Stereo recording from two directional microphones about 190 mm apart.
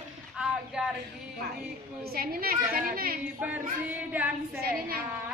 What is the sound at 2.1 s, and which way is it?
A child's voice, 50° right (ahead or behind).